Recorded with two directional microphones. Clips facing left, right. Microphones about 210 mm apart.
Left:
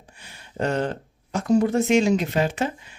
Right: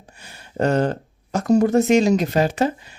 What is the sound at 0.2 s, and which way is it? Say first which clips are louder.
Speech: right 5 dB; 40° right (ahead or behind).